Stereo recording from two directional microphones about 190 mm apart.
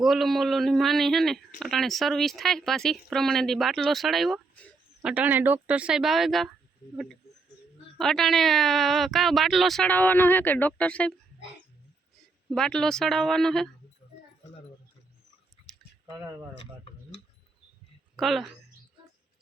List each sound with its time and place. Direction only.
0.0 s speech: centre (ahead or behind)
12.5 s speech: 5° left (ahead or behind)
18.2 s a woman's voice: centre (ahead or behind)